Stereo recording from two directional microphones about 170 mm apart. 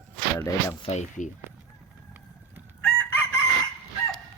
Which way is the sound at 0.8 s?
40° left (ahead or behind).